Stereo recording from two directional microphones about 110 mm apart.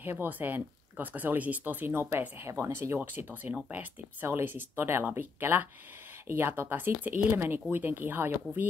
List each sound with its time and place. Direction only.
0.0 s speech: 20° right (ahead or behind)